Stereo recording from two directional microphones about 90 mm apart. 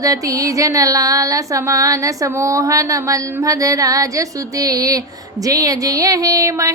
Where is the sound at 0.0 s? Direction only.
40° right (ahead or behind).